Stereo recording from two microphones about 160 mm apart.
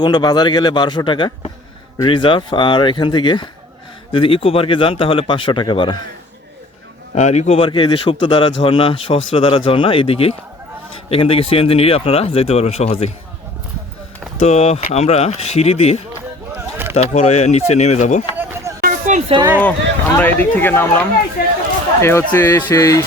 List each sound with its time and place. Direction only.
0.0 s speech: 25° left (ahead or behind)
7.2 s speech: 45° left (ahead or behind)
7.6 s speech: 30° left (ahead or behind)
14.3 s speech: 40° left (ahead or behind)
18.3 s a sound: 15° right (ahead or behind)
18.8 s a sound: 55° right (ahead or behind)
19.5 s speech: 10° left (ahead or behind)
21.4 s a sound: 60° left (ahead or behind)
22.3 s speech: 15° left (ahead or behind)